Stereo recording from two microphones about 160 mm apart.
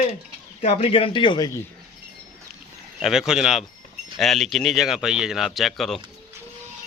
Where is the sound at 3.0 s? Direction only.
Centre (ahead or behind).